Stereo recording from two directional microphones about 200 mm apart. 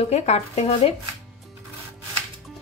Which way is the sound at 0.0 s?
35° left (ahead or behind).